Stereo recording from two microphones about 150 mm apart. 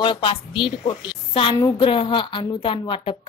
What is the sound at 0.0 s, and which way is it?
A woman's voice, 35° left (ahead or behind).